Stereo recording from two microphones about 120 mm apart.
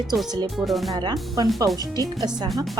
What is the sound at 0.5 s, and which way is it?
Speech, centre (ahead or behind).